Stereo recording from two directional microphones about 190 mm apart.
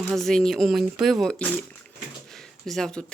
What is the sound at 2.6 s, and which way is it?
Speech, centre (ahead or behind).